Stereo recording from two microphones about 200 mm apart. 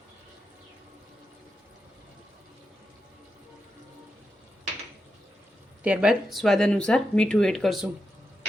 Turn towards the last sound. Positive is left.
turn(degrees=0)  # may be behind; listen again after turning